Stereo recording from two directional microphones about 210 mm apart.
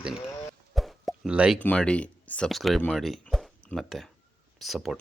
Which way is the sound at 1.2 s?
5° right (ahead or behind).